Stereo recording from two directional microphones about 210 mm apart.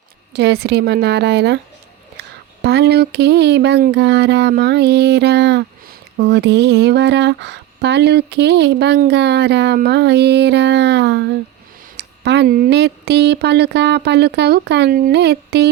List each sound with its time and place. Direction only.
0.3 s speech: 50° right (ahead or behind)